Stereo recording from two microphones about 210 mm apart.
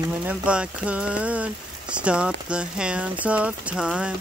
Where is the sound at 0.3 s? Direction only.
5° right (ahead or behind).